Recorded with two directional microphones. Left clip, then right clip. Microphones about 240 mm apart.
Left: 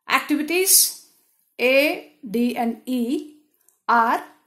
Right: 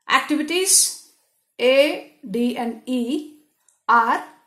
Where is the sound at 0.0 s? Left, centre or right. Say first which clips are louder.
Right 2 dB; left.